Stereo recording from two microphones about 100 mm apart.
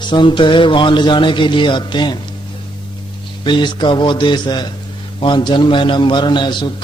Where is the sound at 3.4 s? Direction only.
50° left (ahead or behind).